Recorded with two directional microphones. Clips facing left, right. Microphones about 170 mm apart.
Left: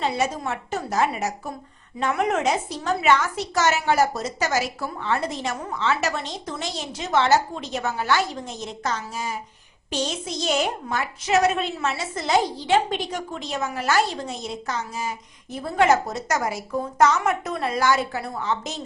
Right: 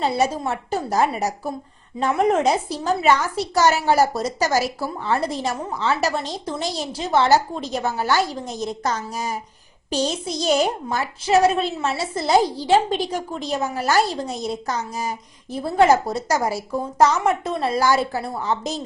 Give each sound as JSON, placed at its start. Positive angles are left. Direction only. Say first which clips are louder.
{"t": 0.0, "sound": "a woman's voice", "louder": "right 4 dB", "side_deg": -35}